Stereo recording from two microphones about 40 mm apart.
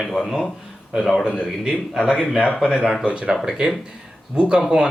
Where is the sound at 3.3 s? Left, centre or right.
Centre.